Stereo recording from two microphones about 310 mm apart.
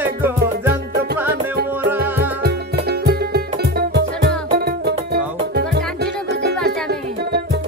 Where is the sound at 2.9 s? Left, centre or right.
Right.